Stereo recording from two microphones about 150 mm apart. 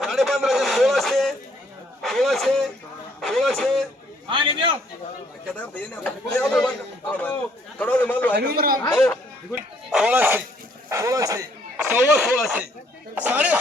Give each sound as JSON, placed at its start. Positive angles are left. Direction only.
{"t": 0.0, "sound": "a sound", "side_deg": 0}
{"t": 2.0, "sound": "a man's voice", "side_deg": 0}
{"t": 3.2, "sound": "radio", "side_deg": 0}
{"t": 4.3, "sound": "a man's voice", "side_deg": -35}
{"t": 5.5, "sound": "speech", "side_deg": 10}
{"t": 8.4, "sound": "a man's voice", "side_deg": -90}
{"t": 8.9, "sound": "speech", "side_deg": 15}
{"t": 9.5, "sound": "speech", "side_deg": -5}
{"t": 11.9, "sound": "speech", "side_deg": -10}